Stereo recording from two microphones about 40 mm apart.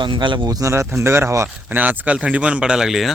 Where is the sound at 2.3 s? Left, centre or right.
Right; by 3.0 s centre.